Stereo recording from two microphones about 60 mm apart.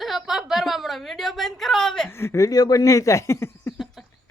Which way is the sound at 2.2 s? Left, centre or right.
Left.